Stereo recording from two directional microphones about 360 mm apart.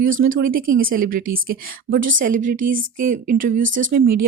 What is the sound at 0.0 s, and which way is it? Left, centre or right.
Speech, right.